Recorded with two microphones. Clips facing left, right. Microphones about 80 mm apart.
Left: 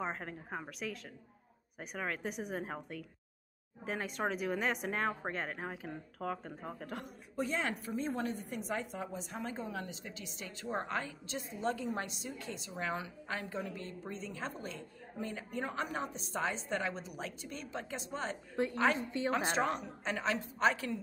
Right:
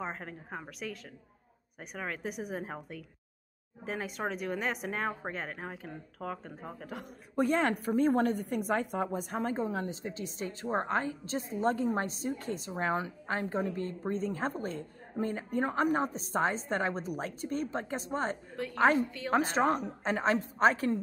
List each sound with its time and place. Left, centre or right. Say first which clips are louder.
0.0 s speech: even; centre
7.3 s a woman's voice: right 8 dB; right
19.0 s a woman's voice: left 4 dB; left
19.5 s a woman's voice: right 5 dB; right